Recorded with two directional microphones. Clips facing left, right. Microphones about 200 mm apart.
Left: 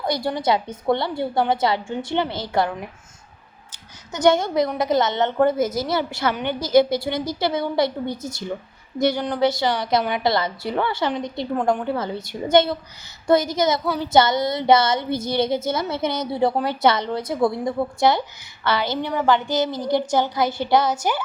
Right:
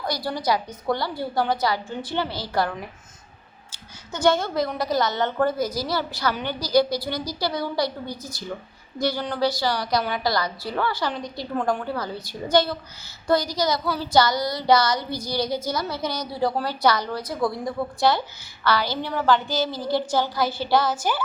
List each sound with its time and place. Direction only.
0.0 s speech: 25° left (ahead or behind)
4.2 s speech: 20° left (ahead or behind)